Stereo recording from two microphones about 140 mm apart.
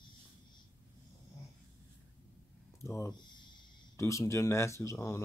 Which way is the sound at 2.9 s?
20° left (ahead or behind).